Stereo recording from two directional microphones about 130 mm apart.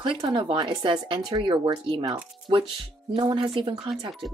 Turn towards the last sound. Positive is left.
turn(degrees=-40)  # may be behind; listen again after turning